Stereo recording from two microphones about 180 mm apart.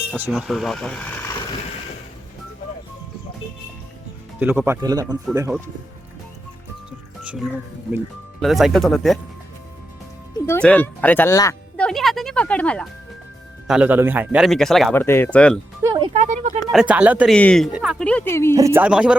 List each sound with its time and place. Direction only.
0.1 s a man's voice: centre (ahead or behind)
4.4 s speech: 10° right (ahead or behind)
7.3 s a man's voice: centre (ahead or behind)
10.4 s speech: 10° left (ahead or behind)
11.8 s music: centre (ahead or behind)
13.7 s a man's voice: 5° right (ahead or behind)
14.9 s speech: 15° left (ahead or behind)
15.8 s music: 20° right (ahead or behind)
16.1 s a sound: 40° right (ahead or behind)
16.7 s speech: 5° right (ahead or behind)
17.3 s a man's voice: 5° left (ahead or behind)
18.0 s speech: 10° left (ahead or behind)
18.5 s speech: 15° right (ahead or behind)